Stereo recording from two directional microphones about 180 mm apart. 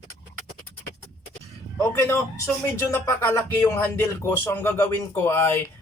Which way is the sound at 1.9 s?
15° left (ahead or behind).